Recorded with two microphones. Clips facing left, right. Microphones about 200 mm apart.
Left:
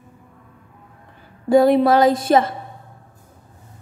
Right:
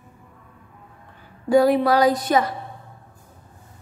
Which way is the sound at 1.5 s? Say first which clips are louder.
Left 3 dB; 25° left (ahead or behind).